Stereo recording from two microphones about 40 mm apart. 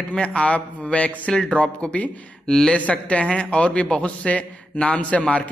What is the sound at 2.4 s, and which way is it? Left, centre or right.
Speech, centre.